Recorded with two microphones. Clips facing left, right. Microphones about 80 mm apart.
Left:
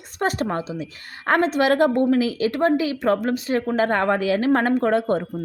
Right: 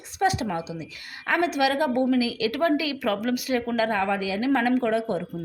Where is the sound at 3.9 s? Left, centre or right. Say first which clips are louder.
Left 5 dB; left.